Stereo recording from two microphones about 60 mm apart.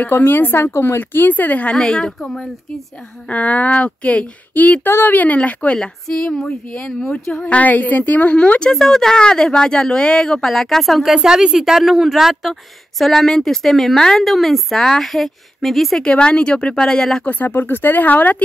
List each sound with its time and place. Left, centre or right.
0.3 s speech: left
1.8 s speech: centre
3.3 s speech: left
5.8 s speech: centre
8.7 s a woman's voice: centre
13.0 s a woman's voice: centre
16.0 s speech: centre
17.2 s speech: left